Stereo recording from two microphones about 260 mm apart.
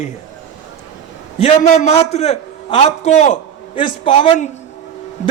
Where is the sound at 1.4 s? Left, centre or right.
Left.